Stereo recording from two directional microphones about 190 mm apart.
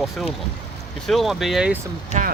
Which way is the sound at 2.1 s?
35° right (ahead or behind).